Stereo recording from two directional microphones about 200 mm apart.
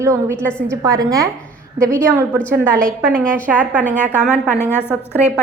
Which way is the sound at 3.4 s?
10° right (ahead or behind).